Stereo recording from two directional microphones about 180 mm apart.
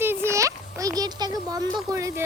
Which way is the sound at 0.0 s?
10° right (ahead or behind).